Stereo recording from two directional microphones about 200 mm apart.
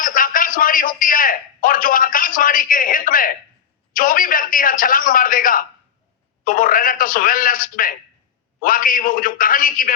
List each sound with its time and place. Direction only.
0.0 s a man's voice: 45° left (ahead or behind)